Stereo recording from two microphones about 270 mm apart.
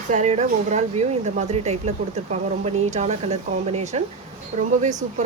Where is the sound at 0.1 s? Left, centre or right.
Right.